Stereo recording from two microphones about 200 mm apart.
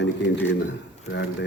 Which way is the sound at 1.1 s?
60° left (ahead or behind).